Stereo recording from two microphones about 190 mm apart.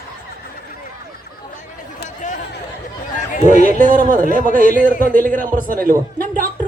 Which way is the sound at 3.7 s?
45° right (ahead or behind).